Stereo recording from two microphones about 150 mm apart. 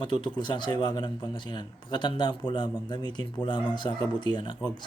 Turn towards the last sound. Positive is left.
turn(degrees=30)  # may be behind; listen again after turning